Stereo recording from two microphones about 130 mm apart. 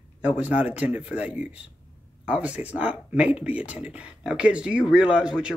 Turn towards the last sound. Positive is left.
turn(degrees=-5)  # may be behind; listen again after turning